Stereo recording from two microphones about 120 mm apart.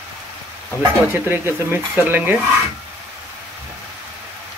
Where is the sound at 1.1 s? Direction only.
20° right (ahead or behind).